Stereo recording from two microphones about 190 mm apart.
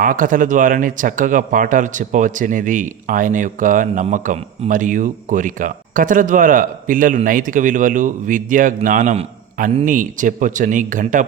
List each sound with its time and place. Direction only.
0.0 s speech: 45° right (ahead or behind)